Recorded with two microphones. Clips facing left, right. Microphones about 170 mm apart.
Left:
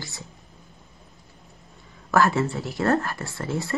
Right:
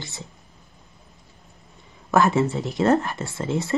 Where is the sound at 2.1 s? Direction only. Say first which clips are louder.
Right 2 dB; 20° right (ahead or behind).